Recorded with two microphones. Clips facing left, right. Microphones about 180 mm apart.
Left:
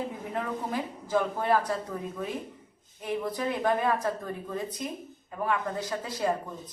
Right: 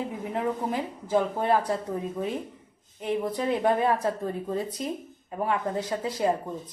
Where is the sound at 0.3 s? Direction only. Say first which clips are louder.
Right 4 dB; 20° right (ahead or behind).